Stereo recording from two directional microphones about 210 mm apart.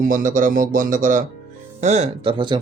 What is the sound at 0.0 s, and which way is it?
Speech, 40° right (ahead or behind).